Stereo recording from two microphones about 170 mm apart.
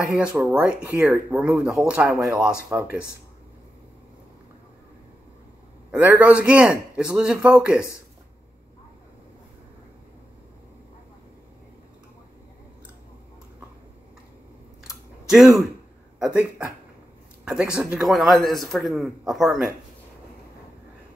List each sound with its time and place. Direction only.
0.0 s a man's voice: 5° right (ahead or behind)
5.9 s a man's voice: 10° right (ahead or behind)
14.8 s clicking: 5° right (ahead or behind)
17.5 s a man's voice: 5° right (ahead or behind)